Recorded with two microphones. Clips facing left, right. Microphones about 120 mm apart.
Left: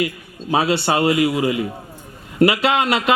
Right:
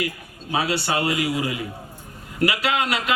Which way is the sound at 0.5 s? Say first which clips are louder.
Left 5 dB; 25° left (ahead or behind).